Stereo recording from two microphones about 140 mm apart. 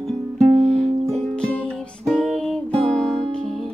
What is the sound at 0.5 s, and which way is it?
Music, 50° right (ahead or behind).